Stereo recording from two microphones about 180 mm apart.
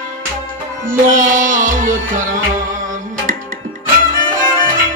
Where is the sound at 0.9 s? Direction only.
45° right (ahead or behind).